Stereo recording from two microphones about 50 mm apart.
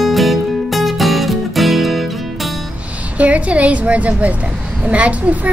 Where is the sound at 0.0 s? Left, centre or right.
Centre.